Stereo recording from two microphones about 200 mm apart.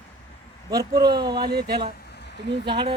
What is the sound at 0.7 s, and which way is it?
Speech, 20° right (ahead or behind).